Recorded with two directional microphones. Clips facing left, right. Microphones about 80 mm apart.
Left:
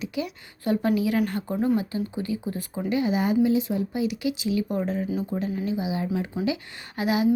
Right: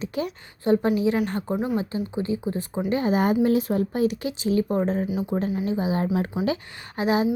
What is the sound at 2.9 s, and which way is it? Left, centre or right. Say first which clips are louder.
Speech: right 1 dB; right.